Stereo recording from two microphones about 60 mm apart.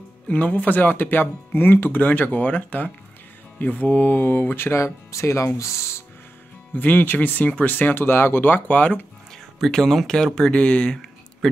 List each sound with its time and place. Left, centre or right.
0.3 s speech: left
6.7 s speech: left
9.3 s speech: centre
10.5 s speech: centre